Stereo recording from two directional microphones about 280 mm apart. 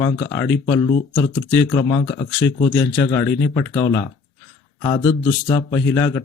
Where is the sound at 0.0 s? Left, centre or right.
Centre.